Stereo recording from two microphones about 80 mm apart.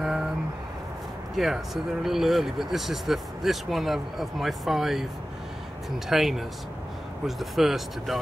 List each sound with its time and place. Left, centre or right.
1.3 s speech: centre